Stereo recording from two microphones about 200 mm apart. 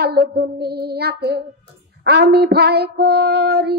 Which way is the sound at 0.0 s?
50° right (ahead or behind).